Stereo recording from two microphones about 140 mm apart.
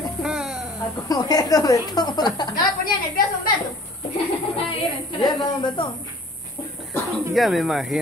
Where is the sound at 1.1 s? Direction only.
25° left (ahead or behind).